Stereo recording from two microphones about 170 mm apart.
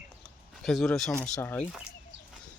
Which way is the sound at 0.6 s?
Centre (ahead or behind).